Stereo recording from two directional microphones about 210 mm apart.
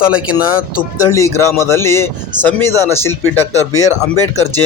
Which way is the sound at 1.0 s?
15° left (ahead or behind).